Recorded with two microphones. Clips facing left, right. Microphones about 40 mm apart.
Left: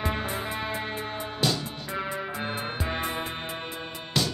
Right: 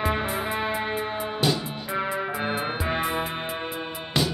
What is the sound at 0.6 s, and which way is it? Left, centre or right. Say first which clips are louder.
Music: right 5 dB; centre.